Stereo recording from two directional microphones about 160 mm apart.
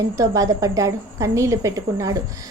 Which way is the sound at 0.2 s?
20° right (ahead or behind).